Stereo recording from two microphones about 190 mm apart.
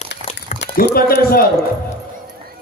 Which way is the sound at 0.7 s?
55° left (ahead or behind).